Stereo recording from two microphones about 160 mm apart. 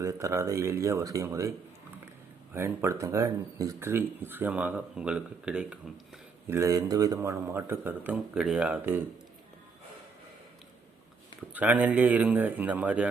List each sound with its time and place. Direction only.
0.0 s speech: 20° right (ahead or behind)
2.6 s speech: 15° right (ahead or behind)
6.5 s speech: 20° right (ahead or behind)
11.5 s speech: 10° right (ahead or behind)